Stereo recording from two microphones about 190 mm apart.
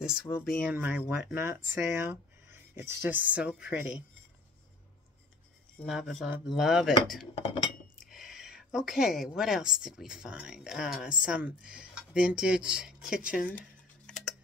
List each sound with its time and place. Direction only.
0.3 s speech: 15° left (ahead or behind)
0.7 s speech: 5° right (ahead or behind)
5.8 s a woman's voice: centre (ahead or behind)
7.4 s cutlery: 25° left (ahead or behind)
8.0 s a woman's voice: centre (ahead or behind)
13.5 s a sound: 5° left (ahead or behind)